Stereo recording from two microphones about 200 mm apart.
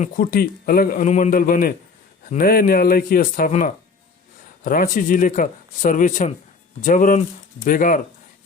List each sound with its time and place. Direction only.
0.0 s a man's voice: 45° left (ahead or behind)